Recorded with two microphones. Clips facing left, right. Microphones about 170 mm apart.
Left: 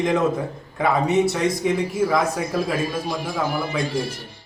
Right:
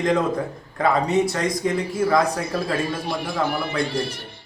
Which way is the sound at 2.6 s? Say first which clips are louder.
Left 1 dB; 65° right (ahead or behind).